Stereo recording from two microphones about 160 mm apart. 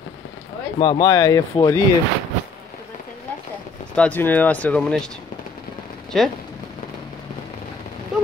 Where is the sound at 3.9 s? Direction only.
10° left (ahead or behind).